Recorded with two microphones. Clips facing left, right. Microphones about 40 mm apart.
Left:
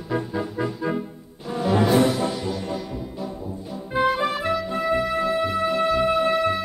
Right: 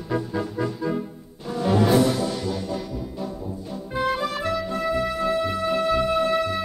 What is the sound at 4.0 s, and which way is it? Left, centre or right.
Music, left.